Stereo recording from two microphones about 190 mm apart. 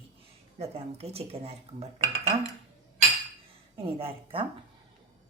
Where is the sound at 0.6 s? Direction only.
30° right (ahead or behind).